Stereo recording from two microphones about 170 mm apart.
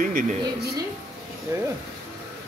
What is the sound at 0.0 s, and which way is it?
Speech, 55° right (ahead or behind).